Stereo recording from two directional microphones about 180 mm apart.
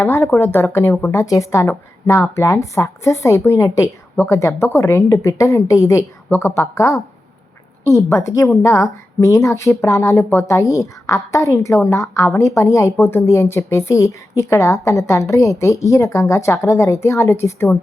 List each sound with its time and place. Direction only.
0.0 s speech: 15° left (ahead or behind)